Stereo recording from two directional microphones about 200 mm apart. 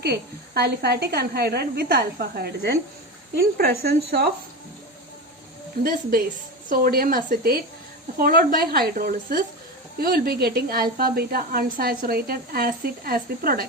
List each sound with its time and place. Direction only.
0.0 s a woman's voice: 55° right (ahead or behind)
5.8 s a woman's voice: 45° right (ahead or behind)